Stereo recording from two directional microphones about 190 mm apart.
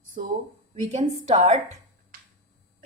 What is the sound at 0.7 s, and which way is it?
Speech, 35° right (ahead or behind).